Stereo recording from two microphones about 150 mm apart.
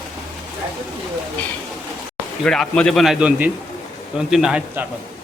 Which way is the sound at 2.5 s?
5° left (ahead or behind).